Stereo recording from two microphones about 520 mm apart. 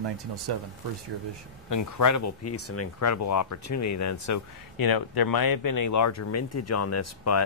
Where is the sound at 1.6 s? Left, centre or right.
Left.